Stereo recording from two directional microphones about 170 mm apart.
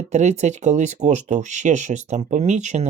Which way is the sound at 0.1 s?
40° right (ahead or behind).